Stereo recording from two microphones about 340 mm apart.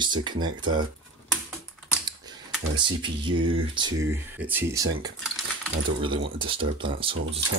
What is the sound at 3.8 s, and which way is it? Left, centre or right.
Speech, centre.